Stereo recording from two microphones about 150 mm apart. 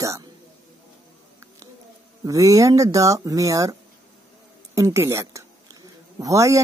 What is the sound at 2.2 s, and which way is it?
A woman's voice, 20° right (ahead or behind).